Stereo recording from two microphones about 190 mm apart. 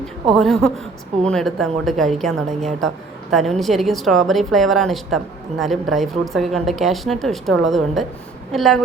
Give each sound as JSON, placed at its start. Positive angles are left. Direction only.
{"t": 0.3, "sound": "a woman's voice", "side_deg": 0}
{"t": 3.3, "sound": "a woman's voice", "side_deg": 0}